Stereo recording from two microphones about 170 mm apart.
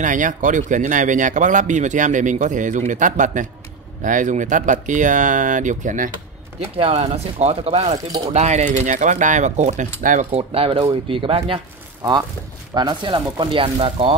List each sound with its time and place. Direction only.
0.0 s a man's voice: 50° right (ahead or behind)
6.6 s a man's voice: 40° right (ahead or behind)
10.5 s speech: 30° right (ahead or behind)
12.7 s speech: 25° right (ahead or behind)